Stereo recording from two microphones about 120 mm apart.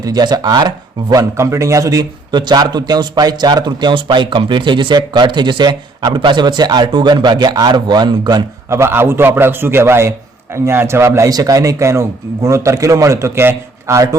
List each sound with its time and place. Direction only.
0.0 s a man's voice: 35° right (ahead or behind)
8.7 s a man's voice: 20° right (ahead or behind)